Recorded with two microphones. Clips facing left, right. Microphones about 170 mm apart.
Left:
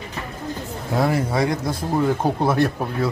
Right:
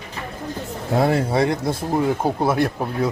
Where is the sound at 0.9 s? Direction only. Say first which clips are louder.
Right 2 dB; 25° right (ahead or behind).